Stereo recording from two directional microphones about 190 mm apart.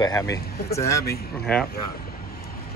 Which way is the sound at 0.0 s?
20° left (ahead or behind).